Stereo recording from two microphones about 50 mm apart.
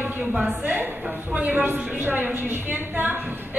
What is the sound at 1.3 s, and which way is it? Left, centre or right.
A woman's voice, right.